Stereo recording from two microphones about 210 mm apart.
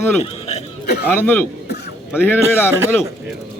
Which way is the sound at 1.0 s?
10° left (ahead or behind).